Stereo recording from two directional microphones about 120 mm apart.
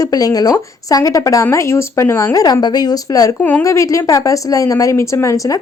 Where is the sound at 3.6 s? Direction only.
25° left (ahead or behind).